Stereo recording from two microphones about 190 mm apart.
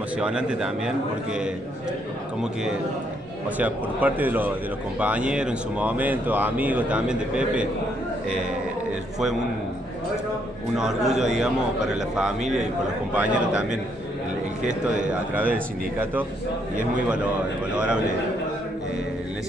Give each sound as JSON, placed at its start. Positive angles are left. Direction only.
{"t": 0.2, "sound": "a man's voice", "side_deg": -5}
{"t": 3.5, "sound": "speech", "side_deg": -10}
{"t": 10.8, "sound": "a man's voice", "side_deg": 0}
{"t": 12.4, "sound": "speech", "side_deg": -40}
{"t": 13.1, "sound": "speech", "side_deg": -5}
{"t": 14.6, "sound": "speech", "side_deg": -40}
{"t": 15.0, "sound": "a man's voice", "side_deg": -10}